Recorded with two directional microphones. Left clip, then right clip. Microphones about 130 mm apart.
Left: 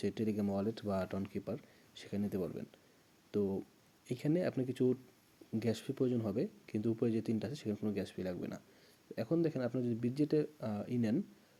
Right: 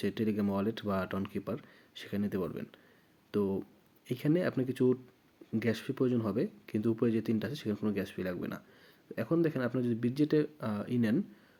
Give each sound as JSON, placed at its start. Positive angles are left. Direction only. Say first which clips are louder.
{"t": 0.0, "sound": "speech", "louder": "right 4 dB", "side_deg": 25}